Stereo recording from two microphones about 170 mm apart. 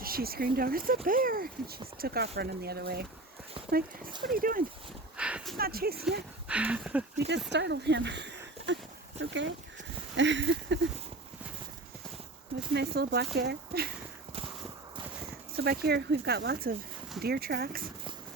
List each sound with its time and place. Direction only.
0.0 s speech: 60° right (ahead or behind)
5.1 s a sound: 5° right (ahead or behind)
5.5 s speech: 60° right (ahead or behind)
6.5 s a sound: 5° right (ahead or behind)
7.2 s speech: 85° right
8.6 s a sound: 90° right
10.2 s speech: 90° right
12.7 s speech: 70° right (ahead or behind)
15.5 s speech: 60° right (ahead or behind)